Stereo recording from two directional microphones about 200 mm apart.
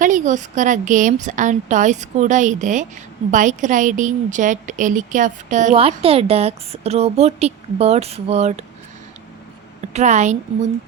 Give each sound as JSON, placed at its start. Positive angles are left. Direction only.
{"t": 0.0, "sound": "a woman's voice", "side_deg": -40}
{"t": 9.9, "sound": "a woman's voice", "side_deg": -35}